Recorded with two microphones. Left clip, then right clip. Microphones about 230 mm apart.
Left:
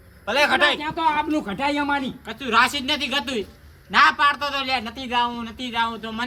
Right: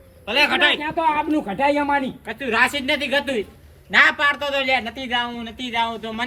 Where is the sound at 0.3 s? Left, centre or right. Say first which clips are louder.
Right 1 dB; left.